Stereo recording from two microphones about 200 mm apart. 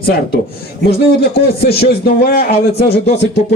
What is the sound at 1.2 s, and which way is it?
A man's voice, 50° left (ahead or behind).